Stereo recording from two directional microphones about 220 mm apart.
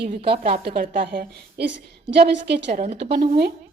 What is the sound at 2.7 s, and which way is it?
Speech, 30° right (ahead or behind).